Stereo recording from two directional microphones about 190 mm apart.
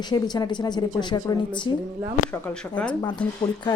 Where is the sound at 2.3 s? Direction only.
5° left (ahead or behind).